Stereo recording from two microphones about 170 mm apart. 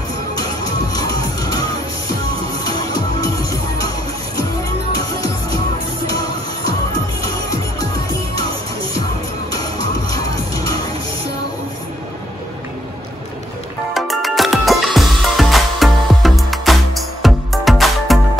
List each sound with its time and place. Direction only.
0.9 s music: 20° left (ahead or behind)
10.1 s music: 20° left (ahead or behind)
13.9 s music: centre (ahead or behind)